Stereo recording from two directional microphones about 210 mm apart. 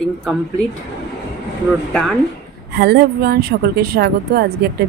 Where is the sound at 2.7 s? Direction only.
50° right (ahead or behind).